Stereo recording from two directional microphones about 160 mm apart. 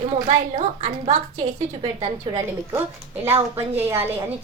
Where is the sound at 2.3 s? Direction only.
30° right (ahead or behind).